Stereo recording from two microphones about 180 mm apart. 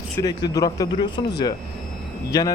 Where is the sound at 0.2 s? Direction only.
20° left (ahead or behind).